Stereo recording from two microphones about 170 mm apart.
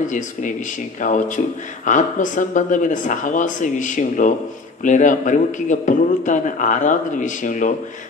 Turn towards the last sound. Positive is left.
turn(degrees=50)  # may be behind; listen again after turning